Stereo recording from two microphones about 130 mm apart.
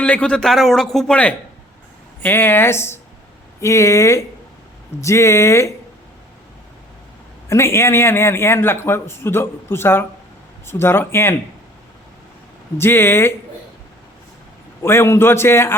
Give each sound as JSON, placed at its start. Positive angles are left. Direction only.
{"t": 0.0, "sound": "a man's voice", "side_deg": 10}
{"t": 7.4, "sound": "a man's voice", "side_deg": 20}
{"t": 12.7, "sound": "speech", "side_deg": 20}
{"t": 14.8, "sound": "a man's voice", "side_deg": 20}